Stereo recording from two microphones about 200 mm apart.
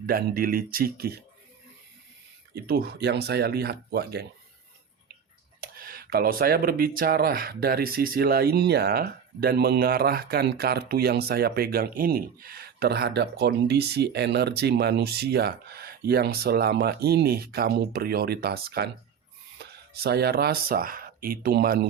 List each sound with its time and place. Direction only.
0.0 s speech: 50° right (ahead or behind)
2.6 s speech: 50° right (ahead or behind)
5.5 s speech: 45° right (ahead or behind)